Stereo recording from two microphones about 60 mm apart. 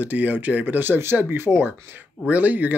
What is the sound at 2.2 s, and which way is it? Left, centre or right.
Speech, right.